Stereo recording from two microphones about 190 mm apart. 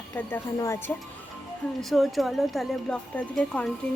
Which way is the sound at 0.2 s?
10° left (ahead or behind).